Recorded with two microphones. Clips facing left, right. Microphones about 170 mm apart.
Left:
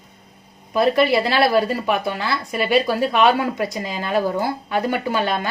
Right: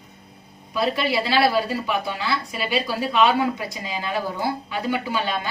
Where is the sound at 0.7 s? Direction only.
50° left (ahead or behind).